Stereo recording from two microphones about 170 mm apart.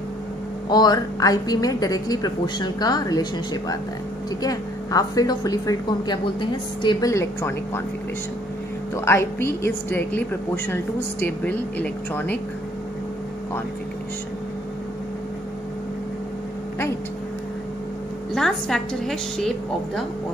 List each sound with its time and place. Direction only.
0.7 s a woman's voice: 25° left (ahead or behind)
8.9 s a woman's voice: 15° left (ahead or behind)
18.3 s a woman's voice: centre (ahead or behind)